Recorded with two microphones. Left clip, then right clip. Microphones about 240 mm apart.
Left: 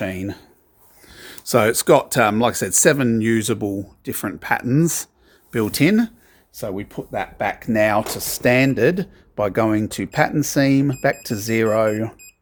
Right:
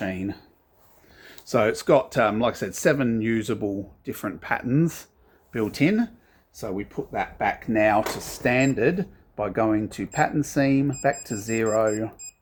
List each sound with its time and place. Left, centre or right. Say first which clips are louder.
0.0 s speech: left 4 dB; left